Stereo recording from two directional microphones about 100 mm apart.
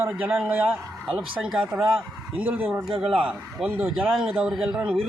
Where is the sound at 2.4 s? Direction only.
15° right (ahead or behind).